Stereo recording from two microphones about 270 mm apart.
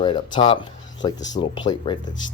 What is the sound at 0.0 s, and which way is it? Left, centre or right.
Speech, centre.